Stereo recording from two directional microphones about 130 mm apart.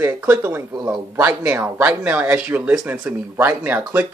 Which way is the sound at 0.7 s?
30° right (ahead or behind).